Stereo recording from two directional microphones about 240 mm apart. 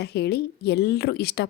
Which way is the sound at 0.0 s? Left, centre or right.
Left.